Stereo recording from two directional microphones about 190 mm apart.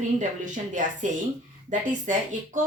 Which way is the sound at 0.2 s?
40° right (ahead or behind).